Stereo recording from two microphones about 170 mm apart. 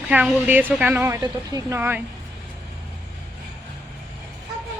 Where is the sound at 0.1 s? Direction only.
5° right (ahead or behind).